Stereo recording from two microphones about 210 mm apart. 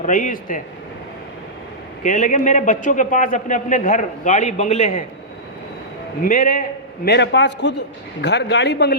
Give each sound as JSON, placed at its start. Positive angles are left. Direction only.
{"t": 0.0, "sound": "a man's voice", "side_deg": 40}
{"t": 2.0, "sound": "a man's voice", "side_deg": 40}
{"t": 6.2, "sound": "a man's voice", "side_deg": 40}